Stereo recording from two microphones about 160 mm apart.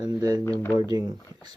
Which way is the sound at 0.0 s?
25° right (ahead or behind).